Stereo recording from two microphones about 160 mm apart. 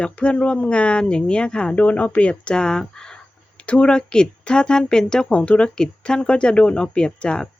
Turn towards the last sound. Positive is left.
turn(degrees=5)  # may be behind; listen again after turning